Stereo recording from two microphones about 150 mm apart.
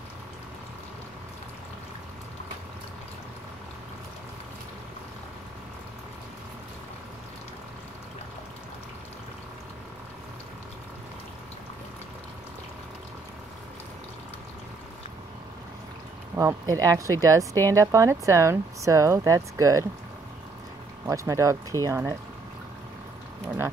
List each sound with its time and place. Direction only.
16.3 s speech: 20° right (ahead or behind)
21.1 s speech: 20° right (ahead or behind)
23.4 s a sound: 15° right (ahead or behind)